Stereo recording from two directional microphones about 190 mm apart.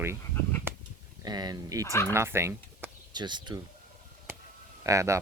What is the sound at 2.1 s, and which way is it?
Speech, 15° right (ahead or behind).